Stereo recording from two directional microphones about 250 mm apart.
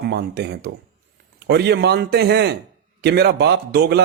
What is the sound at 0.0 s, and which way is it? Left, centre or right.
Speech, right.